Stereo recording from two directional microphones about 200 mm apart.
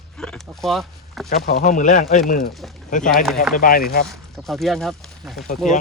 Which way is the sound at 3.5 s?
45° left (ahead or behind).